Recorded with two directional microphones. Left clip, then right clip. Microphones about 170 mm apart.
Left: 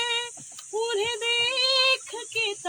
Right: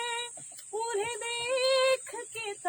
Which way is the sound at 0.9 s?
40° right (ahead or behind).